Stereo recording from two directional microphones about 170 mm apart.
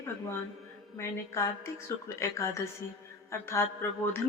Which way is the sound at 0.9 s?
15° left (ahead or behind).